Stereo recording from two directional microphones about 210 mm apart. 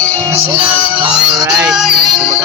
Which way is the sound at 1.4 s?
20° right (ahead or behind).